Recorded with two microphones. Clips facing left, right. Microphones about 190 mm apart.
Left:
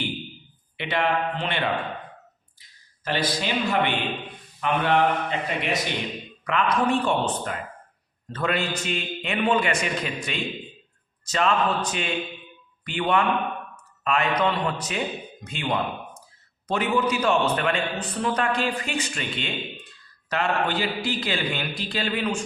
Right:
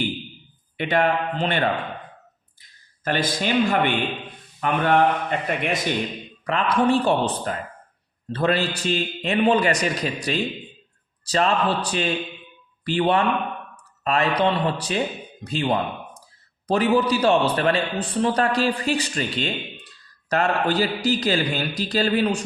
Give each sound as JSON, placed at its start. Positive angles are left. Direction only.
{"t": 0.8, "sound": "a man's voice", "side_deg": -45}
{"t": 6.4, "sound": "a man's voice", "side_deg": -35}